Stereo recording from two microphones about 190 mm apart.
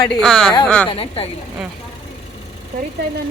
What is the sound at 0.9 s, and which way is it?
Speech, 30° left (ahead or behind).